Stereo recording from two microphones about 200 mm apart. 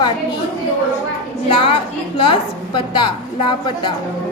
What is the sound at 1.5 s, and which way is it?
A woman's voice, 25° left (ahead or behind).